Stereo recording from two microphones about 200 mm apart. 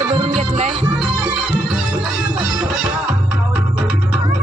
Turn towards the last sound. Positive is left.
turn(degrees=-5)  # may be behind; listen again after turning